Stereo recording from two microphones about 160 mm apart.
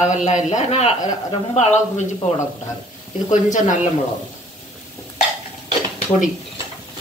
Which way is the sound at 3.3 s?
50° left (ahead or behind).